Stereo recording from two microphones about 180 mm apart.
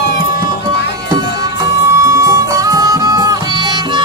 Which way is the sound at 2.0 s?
15° right (ahead or behind).